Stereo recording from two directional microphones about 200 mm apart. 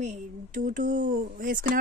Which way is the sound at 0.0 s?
35° right (ahead or behind).